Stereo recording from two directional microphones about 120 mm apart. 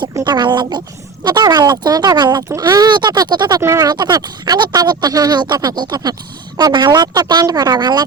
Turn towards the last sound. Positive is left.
turn(degrees=-35)  # may be behind; listen again after turning